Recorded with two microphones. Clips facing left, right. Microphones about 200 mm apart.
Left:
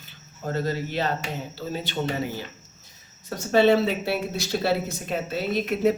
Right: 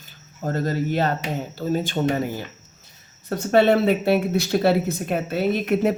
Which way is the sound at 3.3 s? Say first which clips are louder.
Right 2 dB; 60° right (ahead or behind).